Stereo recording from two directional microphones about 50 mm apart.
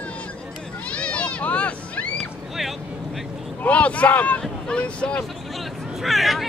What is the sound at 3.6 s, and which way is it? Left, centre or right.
Boat, left.